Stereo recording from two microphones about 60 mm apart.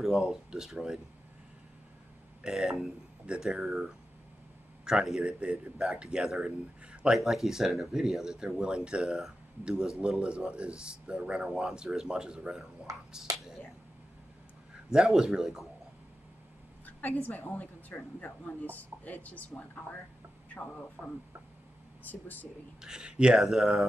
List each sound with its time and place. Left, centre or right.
0.0 s speech: centre
2.4 s speech: centre
4.9 s a man's voice: centre
7.1 s speech: centre
12.9 s speech: right
14.9 s speech: centre
16.8 s a woman's voice: left
22.8 s speech: centre